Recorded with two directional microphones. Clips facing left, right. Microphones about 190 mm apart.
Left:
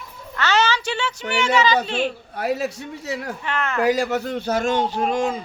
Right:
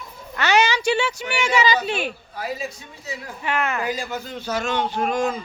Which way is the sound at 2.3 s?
65° left (ahead or behind).